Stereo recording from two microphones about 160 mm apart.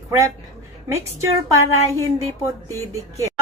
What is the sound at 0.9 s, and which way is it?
Speech, 20° right (ahead or behind).